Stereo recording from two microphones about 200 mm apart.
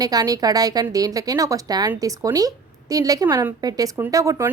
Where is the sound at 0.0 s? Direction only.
20° right (ahead or behind).